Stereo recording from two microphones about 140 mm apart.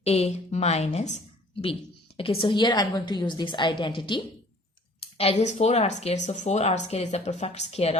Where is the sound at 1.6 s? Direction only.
40° left (ahead or behind).